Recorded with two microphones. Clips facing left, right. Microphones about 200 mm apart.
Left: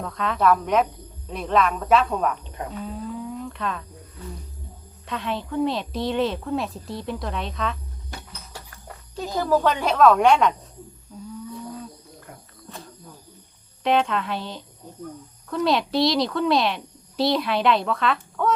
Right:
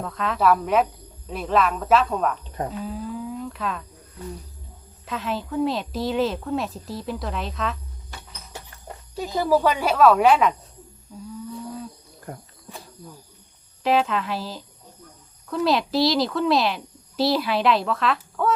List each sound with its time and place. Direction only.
0.0 s speech: centre (ahead or behind)
5.0 s speech: centre (ahead or behind)
8.3 s horse: 15° right (ahead or behind)
9.2 s speech: 5° right (ahead or behind)
11.1 s a sound: 5° right (ahead or behind)
12.3 s cricket: 50° right (ahead or behind)
13.8 s speech: 5° right (ahead or behind)